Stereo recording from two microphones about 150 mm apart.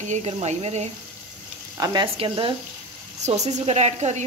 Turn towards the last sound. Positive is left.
turn(degrees=-50)  # may be behind; listen again after turning